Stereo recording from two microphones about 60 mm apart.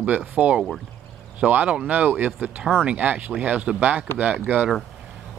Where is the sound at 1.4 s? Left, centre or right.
Right.